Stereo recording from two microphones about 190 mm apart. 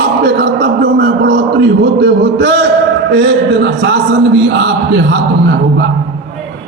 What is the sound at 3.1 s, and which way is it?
A man's voice, 70° right (ahead or behind).